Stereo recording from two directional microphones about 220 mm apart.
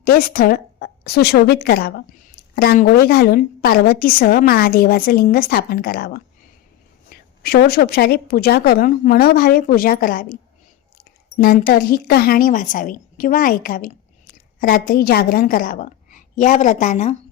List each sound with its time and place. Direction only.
0.0 s a woman's voice: 40° left (ahead or behind)
7.4 s a woman's voice: 45° left (ahead or behind)
11.3 s a woman's voice: 40° left (ahead or behind)